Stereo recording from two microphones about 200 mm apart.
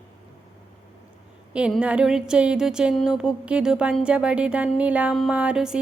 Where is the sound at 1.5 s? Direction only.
5° right (ahead or behind).